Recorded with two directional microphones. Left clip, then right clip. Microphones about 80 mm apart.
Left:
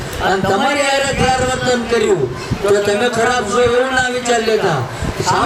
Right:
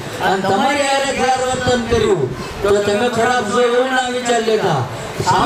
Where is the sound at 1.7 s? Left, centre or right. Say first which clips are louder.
Even; left.